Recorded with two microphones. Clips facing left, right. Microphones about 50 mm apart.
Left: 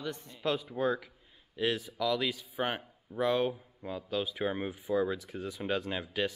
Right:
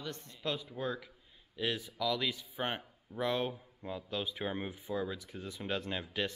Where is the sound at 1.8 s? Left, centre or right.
Centre.